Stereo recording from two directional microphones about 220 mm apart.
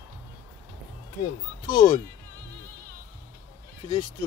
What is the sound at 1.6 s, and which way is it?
Speech, 20° left (ahead or behind).